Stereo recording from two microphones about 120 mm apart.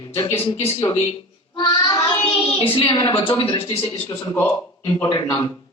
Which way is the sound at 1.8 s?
40° left (ahead or behind).